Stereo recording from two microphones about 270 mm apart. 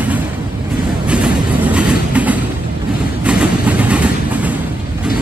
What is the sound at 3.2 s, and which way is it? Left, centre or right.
Vehicle, centre.